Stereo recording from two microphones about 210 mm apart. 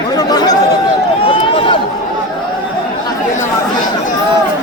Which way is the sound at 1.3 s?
25° left (ahead or behind).